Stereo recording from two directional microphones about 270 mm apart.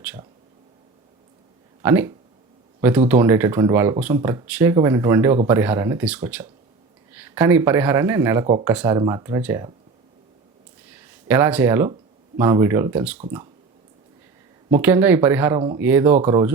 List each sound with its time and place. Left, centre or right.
1.8 s a man's voice: centre
10.8 s a sound: centre
12.4 s speech: centre
14.7 s speech: centre
15.5 s speech: centre